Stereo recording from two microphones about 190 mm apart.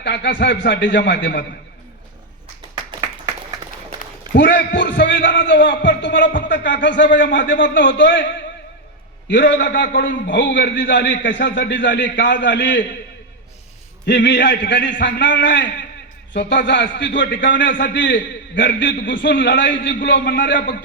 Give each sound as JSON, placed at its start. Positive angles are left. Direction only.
{"t": 0.0, "sound": "speech", "side_deg": 65}
{"t": 4.4, "sound": "speech", "side_deg": 70}
{"t": 9.3, "sound": "speech", "side_deg": 65}
{"t": 14.0, "sound": "a man's voice", "side_deg": 65}
{"t": 17.7, "sound": "a man's voice", "side_deg": 45}
{"t": 17.9, "sound": "a man's voice", "side_deg": 70}